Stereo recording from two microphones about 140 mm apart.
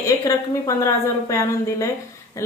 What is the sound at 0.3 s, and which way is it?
A woman's voice, 25° left (ahead or behind).